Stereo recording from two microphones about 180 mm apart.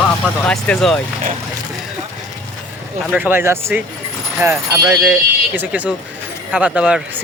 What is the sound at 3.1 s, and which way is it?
Speech, 10° right (ahead or behind).